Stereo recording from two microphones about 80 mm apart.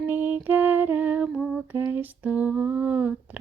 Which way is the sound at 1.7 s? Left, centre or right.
Right.